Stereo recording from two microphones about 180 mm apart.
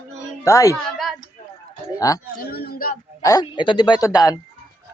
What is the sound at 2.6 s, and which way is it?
Speech, 55° left (ahead or behind).